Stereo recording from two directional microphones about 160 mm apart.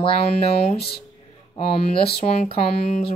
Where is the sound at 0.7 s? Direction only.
80° left.